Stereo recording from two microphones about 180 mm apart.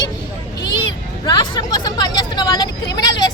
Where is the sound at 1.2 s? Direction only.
25° left (ahead or behind).